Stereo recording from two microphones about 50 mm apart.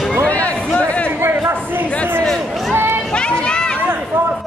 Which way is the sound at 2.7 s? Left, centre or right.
Right.